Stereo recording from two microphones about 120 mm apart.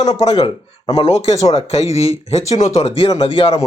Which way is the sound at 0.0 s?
65° left (ahead or behind).